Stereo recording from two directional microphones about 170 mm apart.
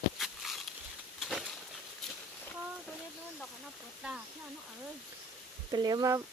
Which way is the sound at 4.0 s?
5° right (ahead or behind).